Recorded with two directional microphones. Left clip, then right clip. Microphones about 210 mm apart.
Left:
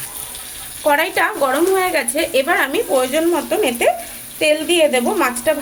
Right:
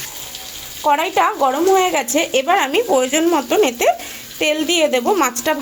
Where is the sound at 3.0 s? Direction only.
45° right (ahead or behind).